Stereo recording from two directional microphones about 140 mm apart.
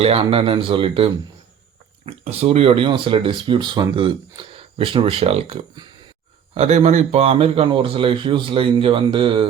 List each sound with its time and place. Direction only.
0.0 s speech: 45° right (ahead or behind)